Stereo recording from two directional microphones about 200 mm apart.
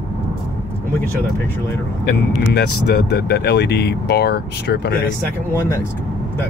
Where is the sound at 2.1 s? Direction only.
55° left (ahead or behind).